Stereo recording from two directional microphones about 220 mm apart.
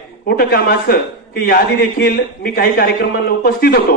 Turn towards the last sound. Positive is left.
turn(degrees=45)  # may be behind; listen again after turning